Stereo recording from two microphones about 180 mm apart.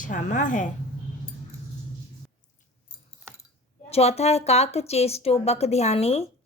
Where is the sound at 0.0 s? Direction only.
45° left (ahead or behind).